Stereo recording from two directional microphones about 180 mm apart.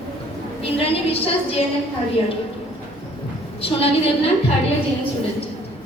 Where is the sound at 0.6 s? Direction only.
30° left (ahead or behind).